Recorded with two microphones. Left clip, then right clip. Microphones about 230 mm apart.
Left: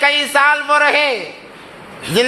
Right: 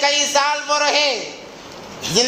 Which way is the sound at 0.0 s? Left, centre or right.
Left.